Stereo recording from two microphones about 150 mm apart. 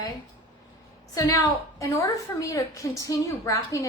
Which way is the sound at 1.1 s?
20° left (ahead or behind).